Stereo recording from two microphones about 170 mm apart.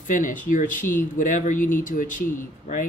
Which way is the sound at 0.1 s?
50° left (ahead or behind).